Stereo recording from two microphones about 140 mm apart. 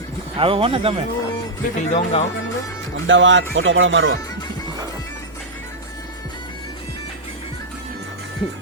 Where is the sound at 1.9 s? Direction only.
50° left (ahead or behind).